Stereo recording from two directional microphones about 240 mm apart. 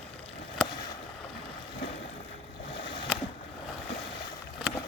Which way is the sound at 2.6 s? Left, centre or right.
Left.